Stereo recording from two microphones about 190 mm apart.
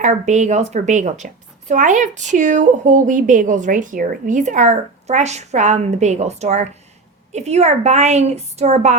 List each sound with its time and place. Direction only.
0.0 s a woman's voice: 40° right (ahead or behind)